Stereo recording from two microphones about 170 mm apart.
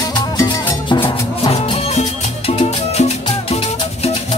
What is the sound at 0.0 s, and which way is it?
Music, 25° left (ahead or behind).